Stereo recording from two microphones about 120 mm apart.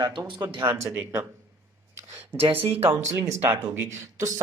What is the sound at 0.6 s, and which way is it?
Speech, 20° right (ahead or behind).